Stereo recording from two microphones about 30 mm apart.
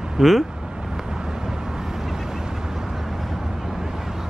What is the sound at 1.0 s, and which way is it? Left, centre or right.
Vehicle, right.